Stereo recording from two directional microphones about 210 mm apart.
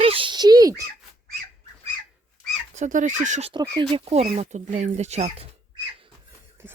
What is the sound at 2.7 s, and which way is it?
Speech, 35° right (ahead or behind).